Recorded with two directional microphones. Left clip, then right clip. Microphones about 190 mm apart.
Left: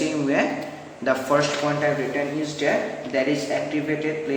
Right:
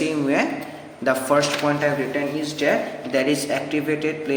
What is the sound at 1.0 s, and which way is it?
Speech, 30° right (ahead or behind).